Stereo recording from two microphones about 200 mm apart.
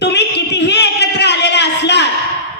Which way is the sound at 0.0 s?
60° left (ahead or behind).